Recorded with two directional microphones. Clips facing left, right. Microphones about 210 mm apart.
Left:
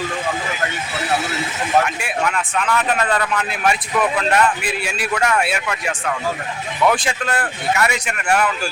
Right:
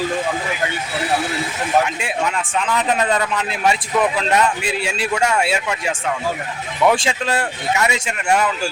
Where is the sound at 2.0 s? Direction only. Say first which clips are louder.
Even; 25° right (ahead or behind).